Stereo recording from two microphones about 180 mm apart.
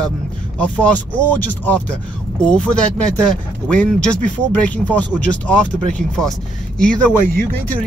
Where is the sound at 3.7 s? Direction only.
5° left (ahead or behind).